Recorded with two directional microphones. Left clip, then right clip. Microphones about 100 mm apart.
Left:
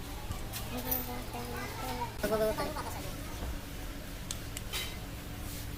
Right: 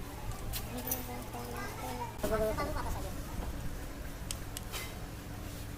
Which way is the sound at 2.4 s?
20° left (ahead or behind).